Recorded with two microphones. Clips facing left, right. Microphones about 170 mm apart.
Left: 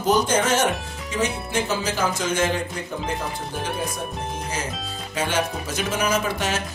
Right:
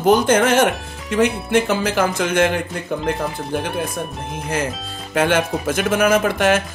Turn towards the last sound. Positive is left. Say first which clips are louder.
# right 8 dB
turn(degrees=-55)  # may be behind; listen again after turning